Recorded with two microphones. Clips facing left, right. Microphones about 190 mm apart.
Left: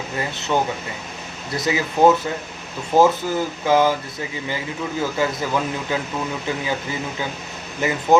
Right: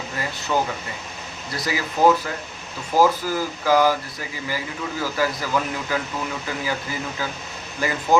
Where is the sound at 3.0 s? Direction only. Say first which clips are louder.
Left 2 dB; 25° left (ahead or behind).